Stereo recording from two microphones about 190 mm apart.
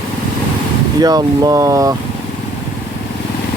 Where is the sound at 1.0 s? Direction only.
20° right (ahead or behind).